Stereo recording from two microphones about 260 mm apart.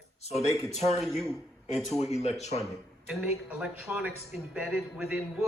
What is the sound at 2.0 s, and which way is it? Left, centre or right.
Speech, left.